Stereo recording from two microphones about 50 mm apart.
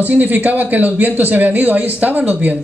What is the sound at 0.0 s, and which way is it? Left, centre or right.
A man's voice, right.